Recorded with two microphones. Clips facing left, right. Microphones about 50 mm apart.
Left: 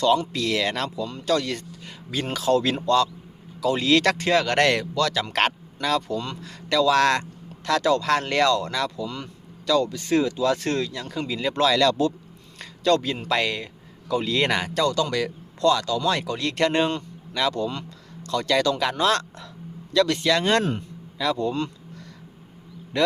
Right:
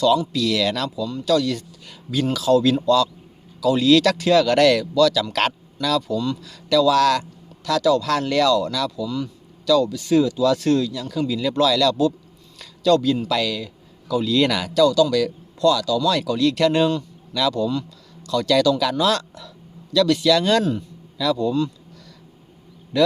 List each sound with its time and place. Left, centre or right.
0.3 s speech: left
0.9 s speech: left
3.6 s speech: left
9.0 s speech: left
9.6 s speech: left
22.9 s speech: left